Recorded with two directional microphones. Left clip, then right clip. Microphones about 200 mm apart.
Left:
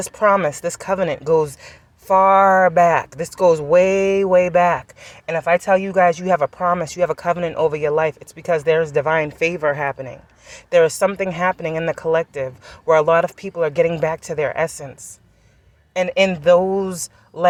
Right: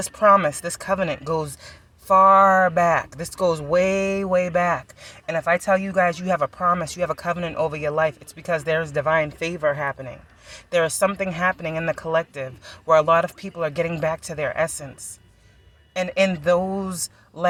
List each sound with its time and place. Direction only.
0.0 s speech: 35° left (ahead or behind)
16.0 s speech: 30° left (ahead or behind)